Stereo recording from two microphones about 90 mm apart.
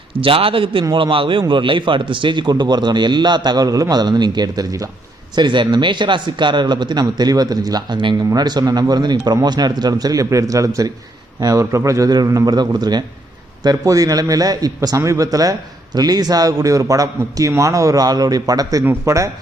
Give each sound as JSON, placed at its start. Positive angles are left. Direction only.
{"t": 0.2, "sound": "a man's voice", "side_deg": -85}
{"t": 5.3, "sound": "a man's voice", "side_deg": -55}
{"t": 13.7, "sound": "a man's voice", "side_deg": -40}